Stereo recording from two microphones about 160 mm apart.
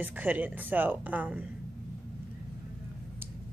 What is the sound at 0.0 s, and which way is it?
A woman's voice, 10° right (ahead or behind).